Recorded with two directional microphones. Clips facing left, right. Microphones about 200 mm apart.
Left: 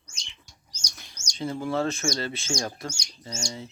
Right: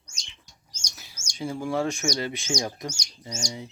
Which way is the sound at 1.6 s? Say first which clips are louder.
Right 1 dB; 15° right (ahead or behind).